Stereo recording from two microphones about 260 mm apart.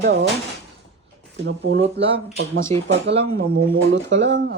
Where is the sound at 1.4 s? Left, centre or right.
Right.